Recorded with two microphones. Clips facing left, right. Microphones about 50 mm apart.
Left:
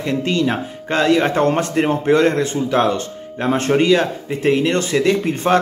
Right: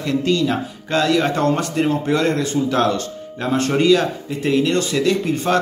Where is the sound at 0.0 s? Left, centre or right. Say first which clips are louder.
Even; left.